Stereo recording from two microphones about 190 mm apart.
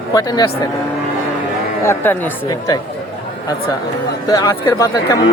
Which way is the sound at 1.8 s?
10° left (ahead or behind).